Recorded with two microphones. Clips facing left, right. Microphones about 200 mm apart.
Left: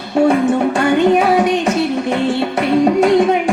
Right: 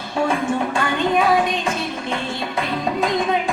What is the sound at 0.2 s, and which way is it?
Music, 70° left (ahead or behind).